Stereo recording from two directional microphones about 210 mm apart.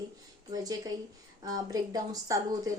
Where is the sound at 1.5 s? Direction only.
20° right (ahead or behind).